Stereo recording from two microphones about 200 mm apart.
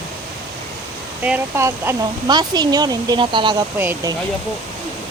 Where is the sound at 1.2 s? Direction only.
10° right (ahead or behind).